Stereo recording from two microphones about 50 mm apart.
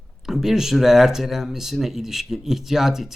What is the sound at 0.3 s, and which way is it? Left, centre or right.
A man's voice, centre.